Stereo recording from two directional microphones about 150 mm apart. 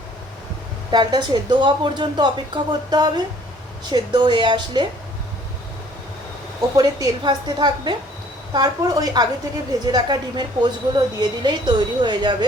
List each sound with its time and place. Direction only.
0.9 s a woman's voice: 30° right (ahead or behind)
6.7 s a woman's voice: 25° right (ahead or behind)